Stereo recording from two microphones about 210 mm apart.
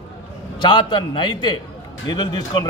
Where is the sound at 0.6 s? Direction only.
20° left (ahead or behind).